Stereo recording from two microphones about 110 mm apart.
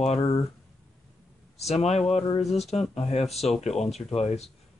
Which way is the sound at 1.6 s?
80° left.